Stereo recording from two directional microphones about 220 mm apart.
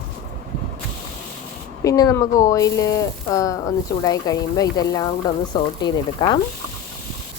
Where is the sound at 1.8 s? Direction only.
15° left (ahead or behind).